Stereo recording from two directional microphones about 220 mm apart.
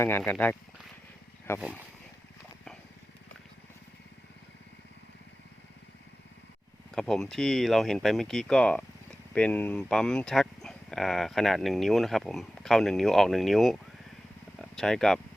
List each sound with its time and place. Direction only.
0.0 s speech: 10° left (ahead or behind)
6.9 s speech: 5° left (ahead or behind)